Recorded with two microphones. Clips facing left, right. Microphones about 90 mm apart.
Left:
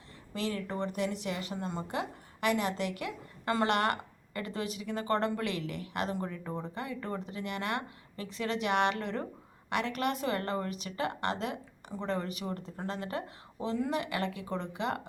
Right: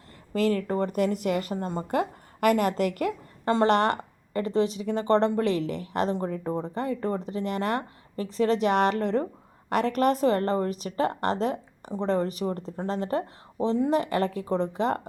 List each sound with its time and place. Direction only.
0.3 s speech: 45° right (ahead or behind)
3.4 s a woman's voice: 35° right (ahead or behind)